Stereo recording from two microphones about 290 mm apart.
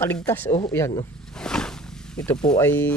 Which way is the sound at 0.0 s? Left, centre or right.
Centre.